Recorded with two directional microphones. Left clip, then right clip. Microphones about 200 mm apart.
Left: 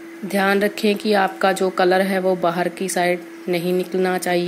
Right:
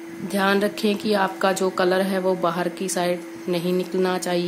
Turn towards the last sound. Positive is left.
turn(degrees=10)  # may be behind; listen again after turning